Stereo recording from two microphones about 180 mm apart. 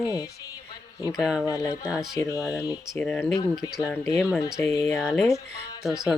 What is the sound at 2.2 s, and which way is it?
Speech, 20° left (ahead or behind).